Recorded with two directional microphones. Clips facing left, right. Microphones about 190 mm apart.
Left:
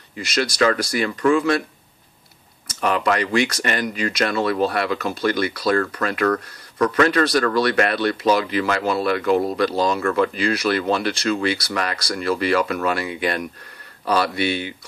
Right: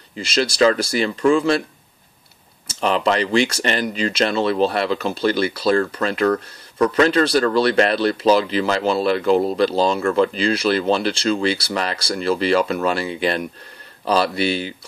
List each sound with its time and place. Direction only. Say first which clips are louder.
0.2 s speech: right 3 dB; 30° right (ahead or behind)
2.7 s speech: right 1 dB; 25° right (ahead or behind)